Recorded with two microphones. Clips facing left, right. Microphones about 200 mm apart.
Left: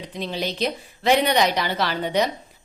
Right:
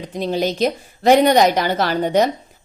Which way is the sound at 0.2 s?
45° right (ahead or behind).